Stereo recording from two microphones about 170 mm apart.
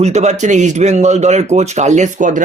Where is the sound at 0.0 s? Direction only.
40° right (ahead or behind).